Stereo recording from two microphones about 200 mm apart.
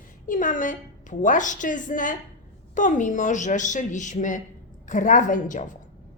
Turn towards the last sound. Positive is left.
turn(degrees=40)  # may be behind; listen again after turning